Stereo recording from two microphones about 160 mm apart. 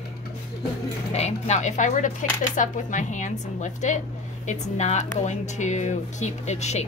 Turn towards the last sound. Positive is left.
turn(degrees=45)  # may be behind; listen again after turning